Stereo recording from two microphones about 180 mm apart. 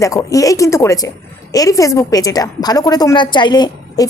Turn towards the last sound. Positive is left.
turn(degrees=25)  # may be behind; listen again after turning